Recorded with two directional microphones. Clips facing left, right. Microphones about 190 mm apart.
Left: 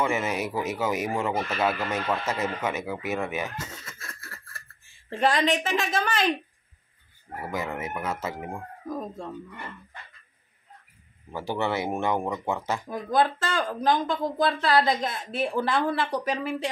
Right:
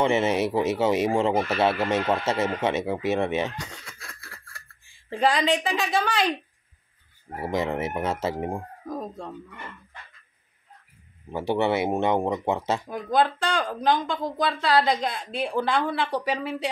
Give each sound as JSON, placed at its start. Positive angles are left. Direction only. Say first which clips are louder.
{"t": 0.0, "sound": "speech", "louder": "right 5 dB", "side_deg": -25}
{"t": 3.5, "sound": "a sound", "louder": "even", "side_deg": 5}
{"t": 7.3, "sound": "speech", "louder": "right 5 dB", "side_deg": -30}
{"t": 11.3, "sound": "speech", "louder": "right 4 dB", "side_deg": -20}
{"t": 13.2, "sound": "speech", "louder": "right 1 dB", "side_deg": 0}